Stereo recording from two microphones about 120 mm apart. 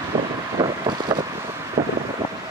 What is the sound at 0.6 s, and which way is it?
Vehicle, 40° right (ahead or behind).